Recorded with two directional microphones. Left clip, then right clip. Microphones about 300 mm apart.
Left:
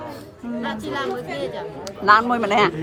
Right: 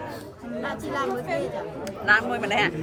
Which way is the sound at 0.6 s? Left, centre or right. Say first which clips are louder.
Left 2 dB; centre.